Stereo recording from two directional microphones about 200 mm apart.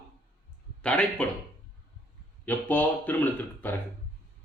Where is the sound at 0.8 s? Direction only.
5° left (ahead or behind).